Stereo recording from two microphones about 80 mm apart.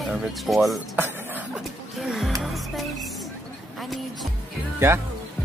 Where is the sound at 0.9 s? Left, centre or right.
Right.